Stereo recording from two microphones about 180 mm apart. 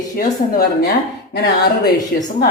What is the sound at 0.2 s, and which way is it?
Speech, 55° left (ahead or behind).